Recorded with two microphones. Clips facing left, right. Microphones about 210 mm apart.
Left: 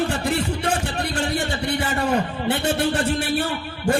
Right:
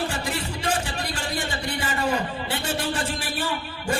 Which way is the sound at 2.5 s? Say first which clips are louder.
Left 9 dB; 60° left (ahead or behind).